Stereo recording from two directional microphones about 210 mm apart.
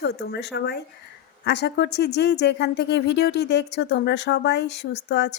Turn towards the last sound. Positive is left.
turn(degrees=55)  # may be behind; listen again after turning